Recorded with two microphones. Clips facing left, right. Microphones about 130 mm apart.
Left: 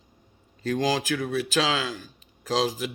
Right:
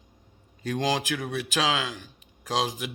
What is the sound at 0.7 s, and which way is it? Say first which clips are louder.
Speech: left 2 dB; 20° right (ahead or behind).